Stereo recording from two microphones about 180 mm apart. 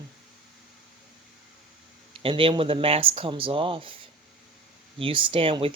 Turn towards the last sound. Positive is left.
turn(degrees=-30)  # may be behind; listen again after turning